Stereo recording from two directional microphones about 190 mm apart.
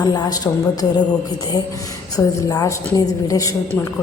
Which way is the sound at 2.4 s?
15° left (ahead or behind).